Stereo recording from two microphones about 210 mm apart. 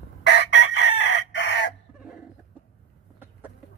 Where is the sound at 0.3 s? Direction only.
55° left (ahead or behind).